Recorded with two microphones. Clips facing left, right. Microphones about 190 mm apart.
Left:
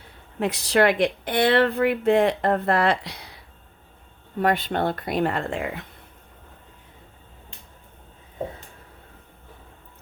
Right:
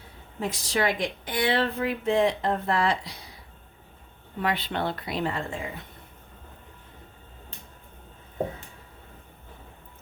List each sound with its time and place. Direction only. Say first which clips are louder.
0.3 s speech: left 7 dB; 65° left (ahead or behind)
4.4 s speech: left 6 dB; 45° left (ahead or behind); by 5.8 s 60° left (ahead or behind)